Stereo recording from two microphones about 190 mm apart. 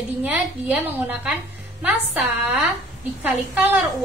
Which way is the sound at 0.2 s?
10° right (ahead or behind).